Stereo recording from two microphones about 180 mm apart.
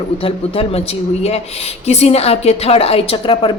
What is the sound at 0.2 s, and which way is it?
Speech, 30° left (ahead or behind).